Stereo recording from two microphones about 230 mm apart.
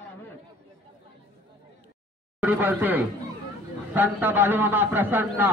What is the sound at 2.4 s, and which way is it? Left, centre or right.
A man's voice, centre.